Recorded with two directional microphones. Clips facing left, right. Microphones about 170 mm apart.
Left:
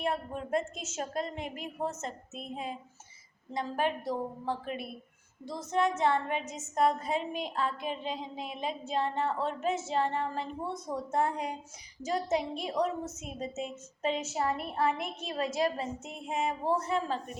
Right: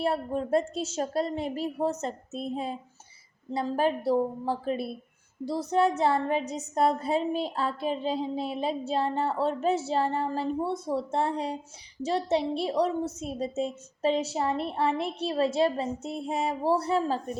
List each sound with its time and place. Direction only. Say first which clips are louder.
0.0 s a woman's voice: right 6 dB; 35° right (ahead or behind)